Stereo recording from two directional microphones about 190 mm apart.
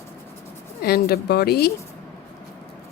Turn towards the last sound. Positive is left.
turn(degrees=55)  # may be behind; listen again after turning